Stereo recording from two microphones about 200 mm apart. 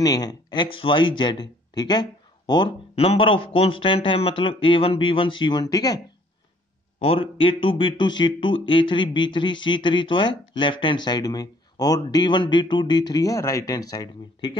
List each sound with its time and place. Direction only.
0.0 s speech: 20° left (ahead or behind)
7.0 s speech: 25° left (ahead or behind)